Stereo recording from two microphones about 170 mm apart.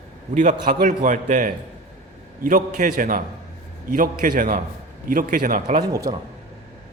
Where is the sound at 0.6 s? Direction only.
50° right (ahead or behind).